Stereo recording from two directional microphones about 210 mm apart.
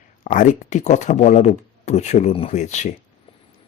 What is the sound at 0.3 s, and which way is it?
Speech, 40° left (ahead or behind).